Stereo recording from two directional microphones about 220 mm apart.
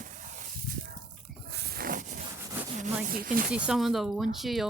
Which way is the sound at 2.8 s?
40° right (ahead or behind).